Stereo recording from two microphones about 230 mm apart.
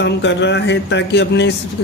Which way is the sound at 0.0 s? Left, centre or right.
Left.